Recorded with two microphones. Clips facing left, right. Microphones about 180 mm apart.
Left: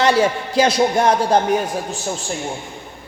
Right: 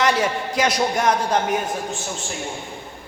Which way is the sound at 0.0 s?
30° left (ahead or behind).